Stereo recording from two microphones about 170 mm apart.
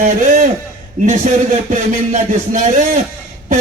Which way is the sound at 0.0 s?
50° right (ahead or behind).